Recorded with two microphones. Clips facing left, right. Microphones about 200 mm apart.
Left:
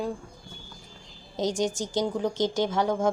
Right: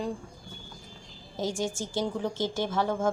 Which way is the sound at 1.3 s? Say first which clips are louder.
Left 4 dB; 20° left (ahead or behind).